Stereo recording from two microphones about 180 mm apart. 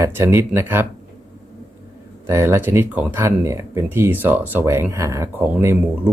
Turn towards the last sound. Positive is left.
turn(degrees=-10)  # may be behind; listen again after turning